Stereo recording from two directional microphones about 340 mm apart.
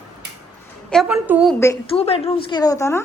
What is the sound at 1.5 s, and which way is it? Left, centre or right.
A woman's voice, centre.